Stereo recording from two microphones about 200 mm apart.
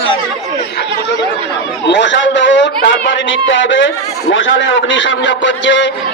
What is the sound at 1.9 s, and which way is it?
A man's voice, 60° left (ahead or behind).